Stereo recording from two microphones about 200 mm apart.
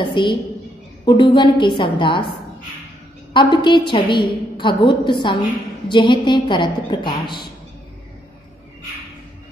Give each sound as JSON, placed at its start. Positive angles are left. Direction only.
{"t": 0.0, "sound": "a woman's voice", "side_deg": 25}
{"t": 3.3, "sound": "a woman's voice", "side_deg": 20}